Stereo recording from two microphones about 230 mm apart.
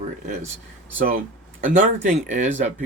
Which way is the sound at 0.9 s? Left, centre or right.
Right.